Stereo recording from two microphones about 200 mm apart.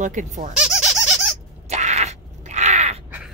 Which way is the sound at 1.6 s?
35° right (ahead or behind).